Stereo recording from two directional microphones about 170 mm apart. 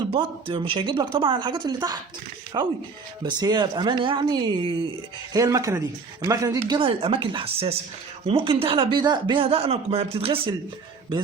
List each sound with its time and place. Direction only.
0.1 s speech: 30° right (ahead or behind)